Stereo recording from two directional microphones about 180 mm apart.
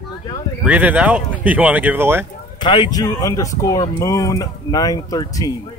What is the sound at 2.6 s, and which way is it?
Speech, 25° left (ahead or behind).